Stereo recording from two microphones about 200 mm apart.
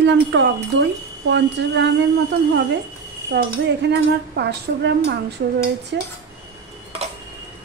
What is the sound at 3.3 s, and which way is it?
A woman's voice, 55° right (ahead or behind).